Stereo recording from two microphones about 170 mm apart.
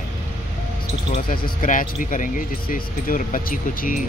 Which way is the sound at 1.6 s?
50° left (ahead or behind).